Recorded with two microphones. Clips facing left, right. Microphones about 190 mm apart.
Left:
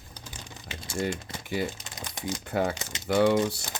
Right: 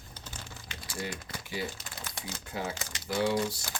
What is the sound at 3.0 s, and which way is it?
Speech, 65° left (ahead or behind).